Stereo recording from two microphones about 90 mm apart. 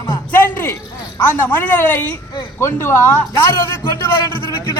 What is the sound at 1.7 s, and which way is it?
Speech, 15° left (ahead or behind).